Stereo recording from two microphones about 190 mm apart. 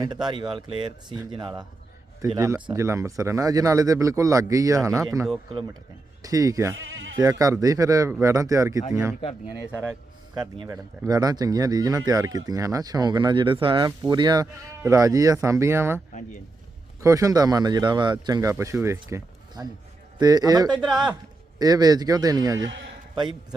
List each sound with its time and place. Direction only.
0.0 s speech: 20° right (ahead or behind)
6.7 s bleat: 90° right
7.2 s speech: 20° right (ahead or behind)
10.3 s speech: 20° right (ahead or behind)
17.0 s speech: 15° right (ahead or behind)